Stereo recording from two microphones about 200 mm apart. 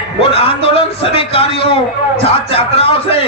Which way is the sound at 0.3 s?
25° left (ahead or behind).